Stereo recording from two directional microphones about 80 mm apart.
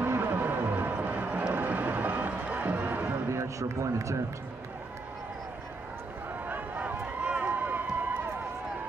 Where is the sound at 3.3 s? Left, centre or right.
Right.